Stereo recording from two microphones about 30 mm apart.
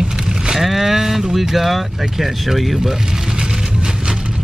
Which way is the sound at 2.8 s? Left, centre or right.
Centre.